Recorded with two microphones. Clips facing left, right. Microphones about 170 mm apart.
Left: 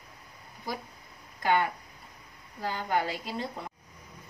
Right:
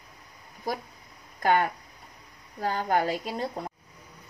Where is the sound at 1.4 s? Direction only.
45° right (ahead or behind).